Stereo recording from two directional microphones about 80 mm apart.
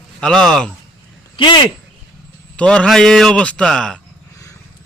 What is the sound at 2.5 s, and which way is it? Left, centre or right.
A man's voice, centre.